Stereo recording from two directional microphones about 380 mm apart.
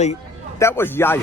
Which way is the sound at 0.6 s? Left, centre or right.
Centre.